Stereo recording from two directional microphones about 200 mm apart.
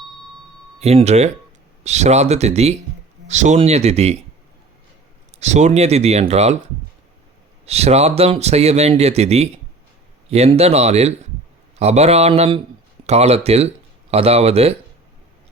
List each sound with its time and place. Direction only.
0.8 s a man's voice: 30° right (ahead or behind)
5.4 s a man's voice: 35° right (ahead or behind)
7.6 s a man's voice: 30° right (ahead or behind)